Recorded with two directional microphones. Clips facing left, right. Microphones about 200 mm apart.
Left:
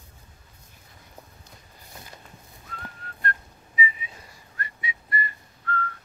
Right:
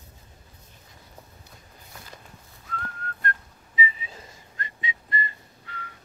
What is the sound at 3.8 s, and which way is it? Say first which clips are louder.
Whistling: even; 30° right (ahead or behind).